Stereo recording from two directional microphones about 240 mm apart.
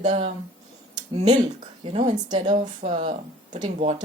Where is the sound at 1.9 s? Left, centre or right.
Right.